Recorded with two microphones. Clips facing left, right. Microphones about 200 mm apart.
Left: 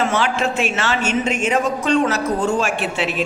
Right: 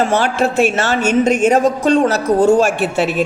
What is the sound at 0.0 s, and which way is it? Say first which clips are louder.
A woman's voice: right 4 dB; 40° right (ahead or behind).